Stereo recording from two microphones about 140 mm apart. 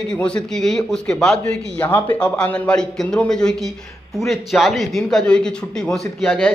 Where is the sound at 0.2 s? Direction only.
5° left (ahead or behind).